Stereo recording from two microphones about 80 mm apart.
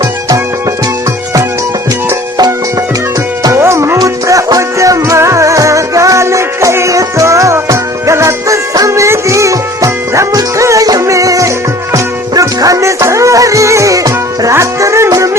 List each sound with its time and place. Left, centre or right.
3.5 s music: right
3.9 s music: right